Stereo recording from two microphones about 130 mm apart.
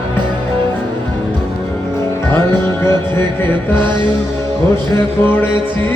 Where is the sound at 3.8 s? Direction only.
35° right (ahead or behind).